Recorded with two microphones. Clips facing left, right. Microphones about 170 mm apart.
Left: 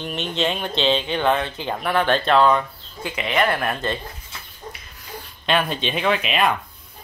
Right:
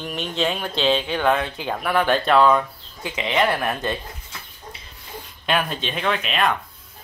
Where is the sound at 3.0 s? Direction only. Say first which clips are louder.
Even; 15° right (ahead or behind).